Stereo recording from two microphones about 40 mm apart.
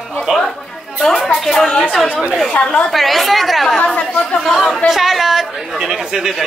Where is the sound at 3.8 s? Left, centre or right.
Left.